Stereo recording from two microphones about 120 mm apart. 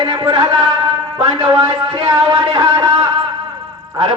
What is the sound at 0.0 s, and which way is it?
Speech, 40° right (ahead or behind).